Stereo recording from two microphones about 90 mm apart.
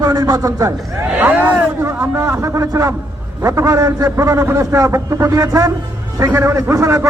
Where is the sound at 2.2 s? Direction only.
30° right (ahead or behind).